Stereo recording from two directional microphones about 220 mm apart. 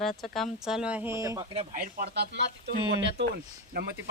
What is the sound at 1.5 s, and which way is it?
Speech, 40° right (ahead or behind).